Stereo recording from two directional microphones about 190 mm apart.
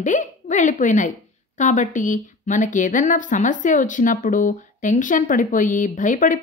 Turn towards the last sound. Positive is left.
turn(degrees=45)  # may be behind; listen again after turning